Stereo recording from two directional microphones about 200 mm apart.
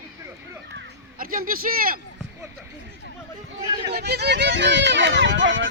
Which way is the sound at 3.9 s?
55° right (ahead or behind).